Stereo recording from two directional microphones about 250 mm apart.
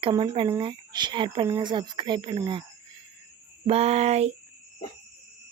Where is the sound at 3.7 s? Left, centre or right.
Right.